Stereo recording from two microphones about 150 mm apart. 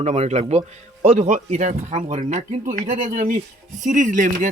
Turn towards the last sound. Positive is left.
turn(degrees=-55)  # may be behind; listen again after turning